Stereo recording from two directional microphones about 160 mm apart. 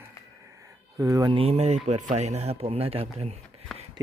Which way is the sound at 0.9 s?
20° right (ahead or behind).